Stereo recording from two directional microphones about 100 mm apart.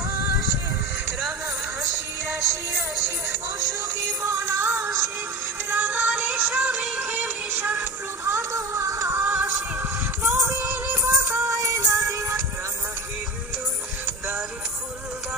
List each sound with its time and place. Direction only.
4.2 s music: 25° right (ahead or behind)
8.3 s music: 30° right (ahead or behind)
11.4 s music: 30° right (ahead or behind)